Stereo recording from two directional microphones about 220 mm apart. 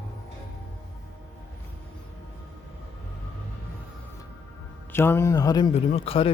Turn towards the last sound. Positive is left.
turn(degrees=25)  # may be behind; listen again after turning